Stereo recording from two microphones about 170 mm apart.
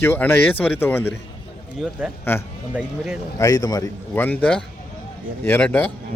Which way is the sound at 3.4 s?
20° left (ahead or behind).